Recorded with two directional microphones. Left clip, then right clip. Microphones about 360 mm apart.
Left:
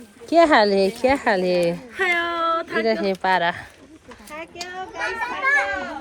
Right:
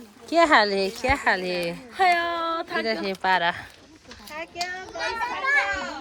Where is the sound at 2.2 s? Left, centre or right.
Right.